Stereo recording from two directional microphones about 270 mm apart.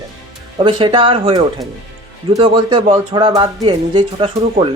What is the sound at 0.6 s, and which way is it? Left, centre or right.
Speech, centre.